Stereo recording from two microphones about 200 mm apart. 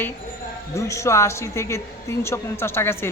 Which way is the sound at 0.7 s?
15° left (ahead or behind).